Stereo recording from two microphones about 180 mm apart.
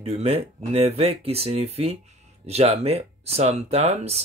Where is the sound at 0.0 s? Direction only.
35° right (ahead or behind).